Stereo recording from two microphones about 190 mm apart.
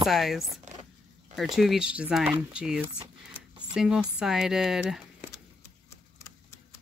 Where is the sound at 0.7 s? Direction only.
40° right (ahead or behind).